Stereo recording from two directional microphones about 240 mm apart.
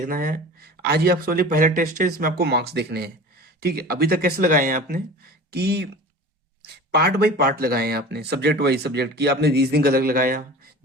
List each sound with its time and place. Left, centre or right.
0.0 s speech: right
6.9 s speech: right